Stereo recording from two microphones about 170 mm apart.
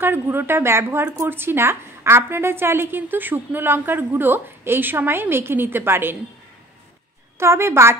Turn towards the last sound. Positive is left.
turn(degrees=-15)  # may be behind; listen again after turning